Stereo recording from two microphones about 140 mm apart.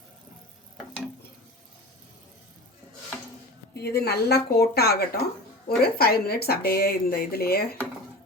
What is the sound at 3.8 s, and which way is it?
Speech, 90° left.